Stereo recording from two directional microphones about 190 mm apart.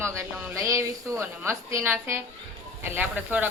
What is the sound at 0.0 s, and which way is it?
Speech, 15° right (ahead or behind).